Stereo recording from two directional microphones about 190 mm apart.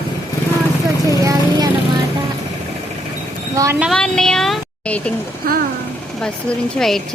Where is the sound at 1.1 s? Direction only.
20° right (ahead or behind).